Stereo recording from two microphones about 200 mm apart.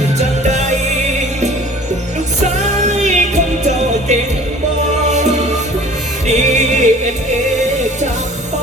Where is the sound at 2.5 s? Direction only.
35° right (ahead or behind).